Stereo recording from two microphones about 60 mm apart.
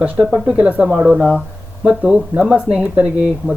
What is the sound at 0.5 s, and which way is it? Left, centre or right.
Speech, right.